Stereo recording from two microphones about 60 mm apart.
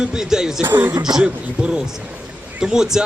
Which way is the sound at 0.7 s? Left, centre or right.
Right.